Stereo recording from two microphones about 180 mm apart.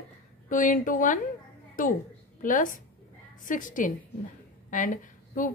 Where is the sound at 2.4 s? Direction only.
45° left (ahead or behind).